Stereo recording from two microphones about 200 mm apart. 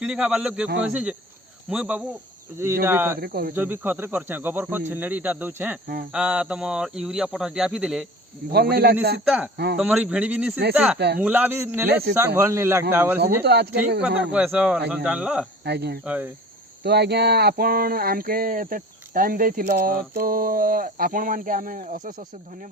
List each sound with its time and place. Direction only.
0.0 s speech: 5° right (ahead or behind)
3.2 s speech: 50° right (ahead or behind)
3.5 s speech: 10° right (ahead or behind)
8.7 s speech: 55° right (ahead or behind)
9.2 s speech: 5° right (ahead or behind)
10.9 s speech: 55° right (ahead or behind)
11.2 s speech: 10° right (ahead or behind)
13.2 s speech: 55° right (ahead or behind)
14.2 s speech: 5° right (ahead or behind)
15.6 s speech: 55° right (ahead or behind)
16.0 s speech: 10° right (ahead or behind)
16.8 s speech: 55° right (ahead or behind)